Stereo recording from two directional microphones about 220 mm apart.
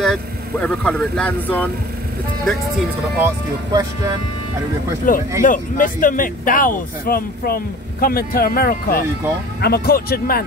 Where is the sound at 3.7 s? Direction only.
15° right (ahead or behind).